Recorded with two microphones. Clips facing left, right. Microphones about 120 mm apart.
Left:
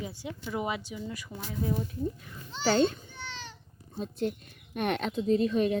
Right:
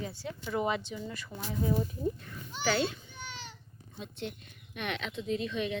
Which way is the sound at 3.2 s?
15° right (ahead or behind).